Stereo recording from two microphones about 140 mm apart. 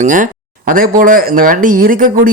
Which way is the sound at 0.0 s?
65° right (ahead or behind).